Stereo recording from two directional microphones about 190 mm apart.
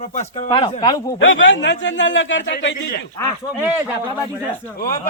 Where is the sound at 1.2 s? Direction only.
90° left.